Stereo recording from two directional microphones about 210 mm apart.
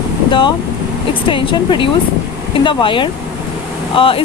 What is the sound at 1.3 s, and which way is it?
Speech, 25° left (ahead or behind).